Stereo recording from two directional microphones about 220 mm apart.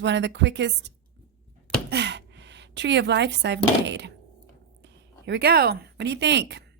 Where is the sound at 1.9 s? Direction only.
50° right (ahead or behind).